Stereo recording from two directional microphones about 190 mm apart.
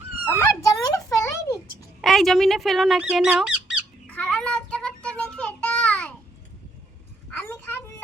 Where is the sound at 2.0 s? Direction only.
Centre (ahead or behind).